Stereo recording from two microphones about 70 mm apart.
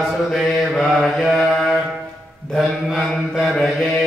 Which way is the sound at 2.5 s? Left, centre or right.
Centre.